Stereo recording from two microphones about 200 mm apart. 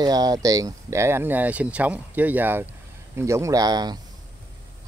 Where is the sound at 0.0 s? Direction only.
20° right (ahead or behind).